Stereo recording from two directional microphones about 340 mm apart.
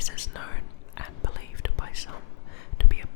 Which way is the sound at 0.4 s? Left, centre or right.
Left.